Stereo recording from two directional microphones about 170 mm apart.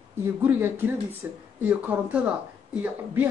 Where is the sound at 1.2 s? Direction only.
10° right (ahead or behind).